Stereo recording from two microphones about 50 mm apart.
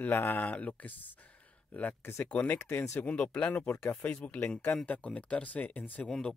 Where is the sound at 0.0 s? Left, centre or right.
Left.